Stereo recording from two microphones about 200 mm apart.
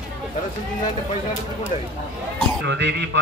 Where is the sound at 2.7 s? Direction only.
60° right (ahead or behind).